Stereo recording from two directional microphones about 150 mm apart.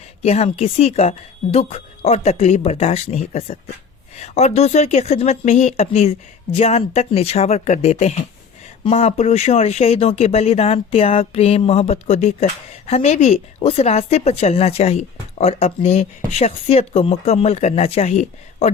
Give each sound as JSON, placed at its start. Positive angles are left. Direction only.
{"t": 0.2, "sound": "speech", "side_deg": 45}